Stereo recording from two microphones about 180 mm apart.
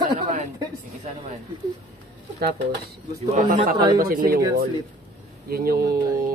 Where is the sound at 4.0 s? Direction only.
55° right (ahead or behind).